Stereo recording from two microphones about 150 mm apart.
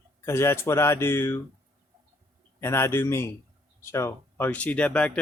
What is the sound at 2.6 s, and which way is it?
Speech, 15° left (ahead or behind).